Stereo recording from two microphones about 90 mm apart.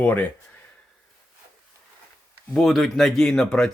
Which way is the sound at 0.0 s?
20° left (ahead or behind).